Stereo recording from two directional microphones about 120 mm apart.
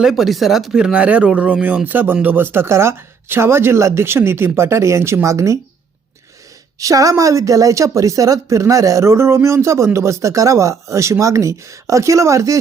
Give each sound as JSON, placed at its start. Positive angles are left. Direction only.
{"t": 0.0, "sound": "a woman's voice", "side_deg": 0}
{"t": 6.7, "sound": "a woman's voice", "side_deg": -30}